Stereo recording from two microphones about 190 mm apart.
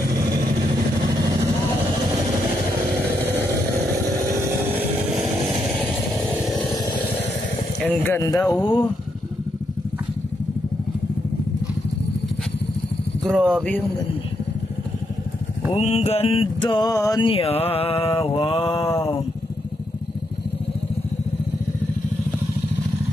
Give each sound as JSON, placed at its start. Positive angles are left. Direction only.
{"t": 4.4, "sound": "vehicle", "side_deg": -10}
{"t": 7.8, "sound": "speech", "side_deg": 10}
{"t": 13.4, "sound": "speech", "side_deg": 5}
{"t": 15.7, "sound": "a sound", "side_deg": 35}